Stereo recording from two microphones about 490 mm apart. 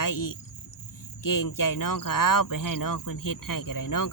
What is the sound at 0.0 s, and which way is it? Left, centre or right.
Speech, left.